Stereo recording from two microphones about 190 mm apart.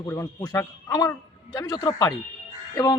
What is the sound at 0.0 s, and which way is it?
A man's voice, 15° left (ahead or behind).